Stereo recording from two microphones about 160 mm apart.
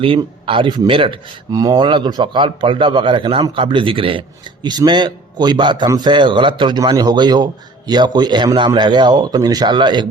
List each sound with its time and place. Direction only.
0.0 s speech: 35° right (ahead or behind)